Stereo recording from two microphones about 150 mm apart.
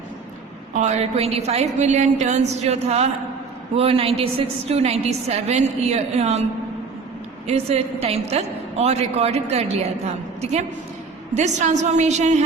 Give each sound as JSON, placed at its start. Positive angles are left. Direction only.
{"t": 0.7, "sound": "a woman's voice", "side_deg": -50}
{"t": 7.4, "sound": "a woman's voice", "side_deg": -45}